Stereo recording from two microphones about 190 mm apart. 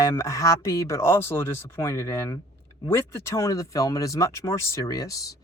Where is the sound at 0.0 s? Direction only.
15° left (ahead or behind).